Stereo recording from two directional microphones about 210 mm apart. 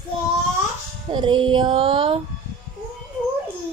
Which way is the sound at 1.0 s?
25° right (ahead or behind).